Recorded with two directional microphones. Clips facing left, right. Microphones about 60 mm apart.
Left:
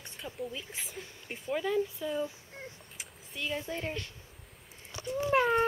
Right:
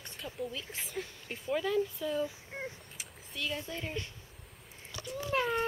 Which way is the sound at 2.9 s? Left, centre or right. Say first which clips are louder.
Even; centre.